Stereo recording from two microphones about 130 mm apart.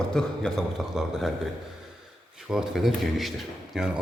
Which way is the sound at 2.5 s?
5° right (ahead or behind).